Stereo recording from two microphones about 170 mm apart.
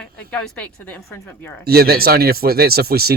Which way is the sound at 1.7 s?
65° right (ahead or behind).